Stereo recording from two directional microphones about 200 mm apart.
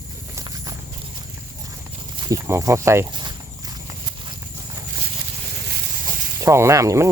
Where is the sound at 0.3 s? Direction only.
20° right (ahead or behind).